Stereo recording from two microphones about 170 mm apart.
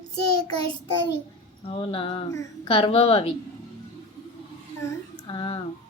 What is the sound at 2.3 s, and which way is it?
Child singing, 20° left (ahead or behind).